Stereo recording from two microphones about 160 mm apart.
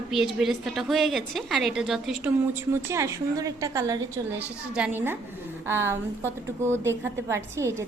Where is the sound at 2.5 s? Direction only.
15° right (ahead or behind).